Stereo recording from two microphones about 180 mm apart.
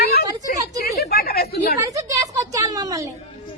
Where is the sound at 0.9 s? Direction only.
60° left (ahead or behind).